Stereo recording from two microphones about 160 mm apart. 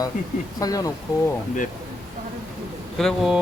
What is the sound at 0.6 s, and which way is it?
Speech, 20° left (ahead or behind).